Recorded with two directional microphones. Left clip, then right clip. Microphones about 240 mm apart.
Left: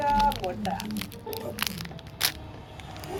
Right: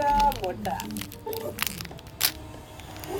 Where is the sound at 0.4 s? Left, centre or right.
Right.